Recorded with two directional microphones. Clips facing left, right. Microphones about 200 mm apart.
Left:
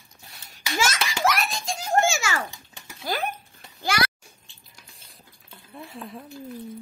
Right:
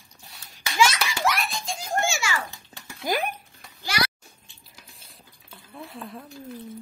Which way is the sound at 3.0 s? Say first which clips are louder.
Right 2 dB; 15° right (ahead or behind).